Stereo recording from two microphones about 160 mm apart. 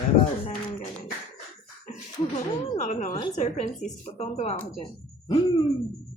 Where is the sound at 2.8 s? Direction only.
50° left (ahead or behind).